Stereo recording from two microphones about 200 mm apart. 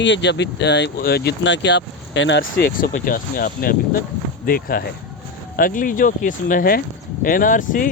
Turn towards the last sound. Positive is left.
turn(degrees=40)  # may be behind; listen again after turning